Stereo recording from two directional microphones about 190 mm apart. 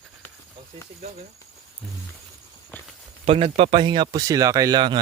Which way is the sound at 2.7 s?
10° left (ahead or behind).